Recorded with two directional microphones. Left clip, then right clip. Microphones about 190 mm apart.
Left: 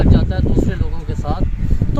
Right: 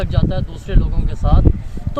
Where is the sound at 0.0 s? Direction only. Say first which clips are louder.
Left 3 dB; 35° right (ahead or behind).